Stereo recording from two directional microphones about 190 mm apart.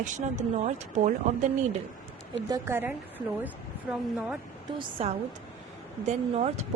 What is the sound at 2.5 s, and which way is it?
Speech, 10° right (ahead or behind).